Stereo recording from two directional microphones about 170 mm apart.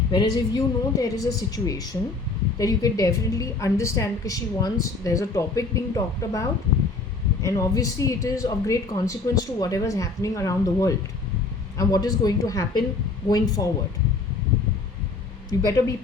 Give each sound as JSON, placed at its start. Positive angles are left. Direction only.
{"t": 0.1, "sound": "a woman's voice", "side_deg": 25}
{"t": 15.4, "sound": "a woman's voice", "side_deg": 20}